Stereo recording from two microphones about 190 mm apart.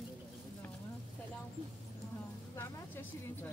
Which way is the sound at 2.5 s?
10° left (ahead or behind).